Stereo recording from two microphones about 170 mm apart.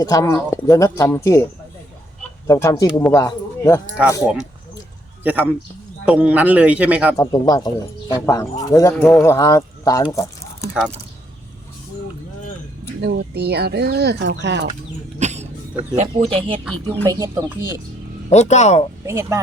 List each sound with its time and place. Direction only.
0.0 s speech: 20° left (ahead or behind)
2.5 s speech: 20° left (ahead or behind)
5.2 s a man's voice: 10° right (ahead or behind)
7.2 s speech: 20° left (ahead or behind)
10.1 s a sound: 20° left (ahead or behind)
13.0 s speech: 80° right
15.2 s a sound: 45° right (ahead or behind)
16.0 s speech: 35° right (ahead or behind)
17.1 s a man's voice: 15° right (ahead or behind)
18.3 s speech: 40° left (ahead or behind)
19.0 s a man's voice: 15° right (ahead or behind)